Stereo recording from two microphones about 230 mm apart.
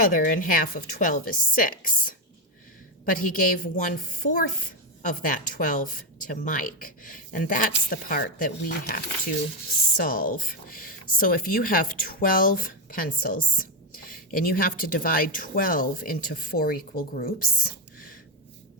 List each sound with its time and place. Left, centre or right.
0.0 s speech: left